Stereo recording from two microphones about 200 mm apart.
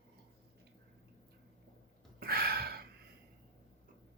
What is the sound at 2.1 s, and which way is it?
Gasp, 50° right (ahead or behind).